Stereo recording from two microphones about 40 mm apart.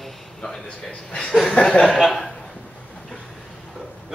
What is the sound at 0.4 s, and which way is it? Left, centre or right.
Speech, centre.